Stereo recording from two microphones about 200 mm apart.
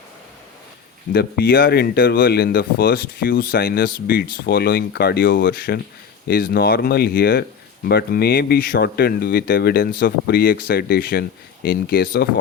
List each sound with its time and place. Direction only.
1.1 s speech: 50° left (ahead or behind)